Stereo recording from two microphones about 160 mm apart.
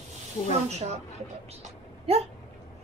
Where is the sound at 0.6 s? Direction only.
40° right (ahead or behind).